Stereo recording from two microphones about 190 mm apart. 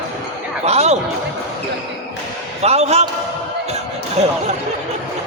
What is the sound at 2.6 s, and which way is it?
Basketball bounce, 35° right (ahead or behind).